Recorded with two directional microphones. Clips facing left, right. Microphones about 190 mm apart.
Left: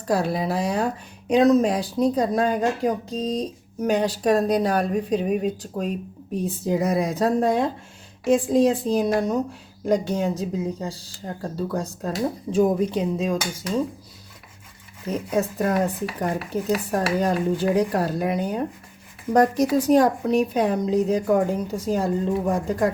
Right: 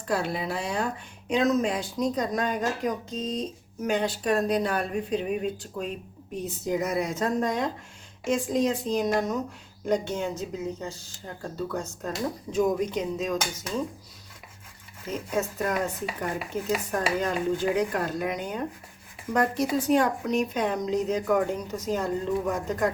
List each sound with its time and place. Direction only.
0.1 s speech: 40° left (ahead or behind)
15.4 s speech: 35° left (ahead or behind)